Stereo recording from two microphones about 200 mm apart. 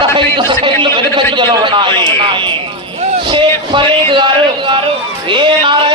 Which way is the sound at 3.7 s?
25° right (ahead or behind).